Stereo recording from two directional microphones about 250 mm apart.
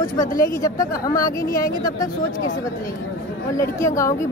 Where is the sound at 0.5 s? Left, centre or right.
Centre.